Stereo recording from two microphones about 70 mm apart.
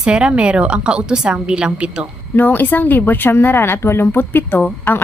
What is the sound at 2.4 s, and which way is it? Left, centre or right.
Speech, left.